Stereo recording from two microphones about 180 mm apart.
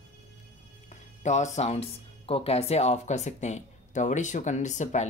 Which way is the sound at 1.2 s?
40° left (ahead or behind).